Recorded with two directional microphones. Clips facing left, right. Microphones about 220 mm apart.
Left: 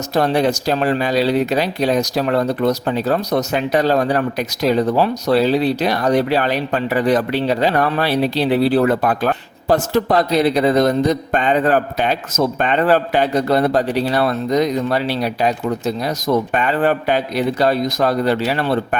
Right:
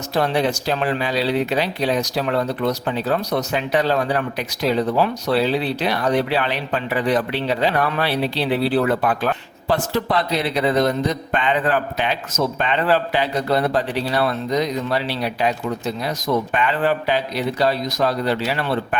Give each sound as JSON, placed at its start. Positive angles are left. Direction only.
{"t": 0.1, "sound": "speech", "side_deg": 40}